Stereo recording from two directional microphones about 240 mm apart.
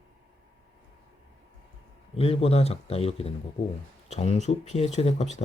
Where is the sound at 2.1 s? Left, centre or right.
Left.